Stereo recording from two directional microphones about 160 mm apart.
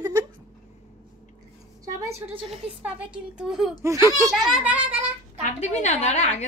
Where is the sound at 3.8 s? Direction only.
20° right (ahead or behind).